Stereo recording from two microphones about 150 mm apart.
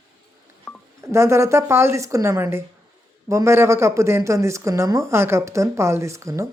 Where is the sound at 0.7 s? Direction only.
5° left (ahead or behind).